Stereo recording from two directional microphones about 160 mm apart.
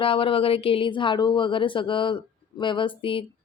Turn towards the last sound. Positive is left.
turn(degrees=35)  # may be behind; listen again after turning